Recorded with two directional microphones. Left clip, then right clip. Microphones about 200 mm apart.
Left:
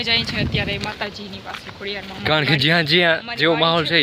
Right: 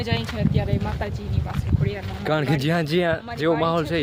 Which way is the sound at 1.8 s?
5° right (ahead or behind).